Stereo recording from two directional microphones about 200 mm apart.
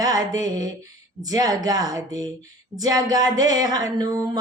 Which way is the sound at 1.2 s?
20° right (ahead or behind).